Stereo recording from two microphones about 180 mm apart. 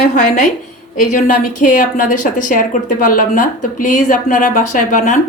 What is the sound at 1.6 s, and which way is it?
A woman's voice, 45° left (ahead or behind).